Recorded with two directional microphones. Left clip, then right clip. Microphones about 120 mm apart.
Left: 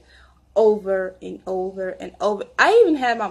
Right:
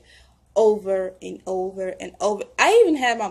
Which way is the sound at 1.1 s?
10° right (ahead or behind).